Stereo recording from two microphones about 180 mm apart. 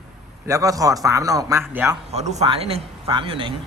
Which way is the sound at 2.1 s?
40° right (ahead or behind).